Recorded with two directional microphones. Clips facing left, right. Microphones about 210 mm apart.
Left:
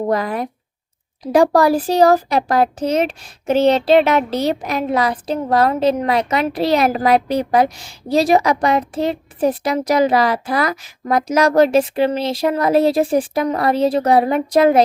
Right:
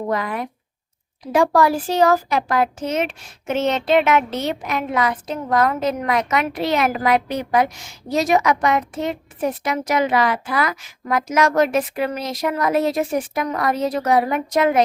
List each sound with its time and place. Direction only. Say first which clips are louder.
0.1 s speech: left 4 dB; 35° left (ahead or behind)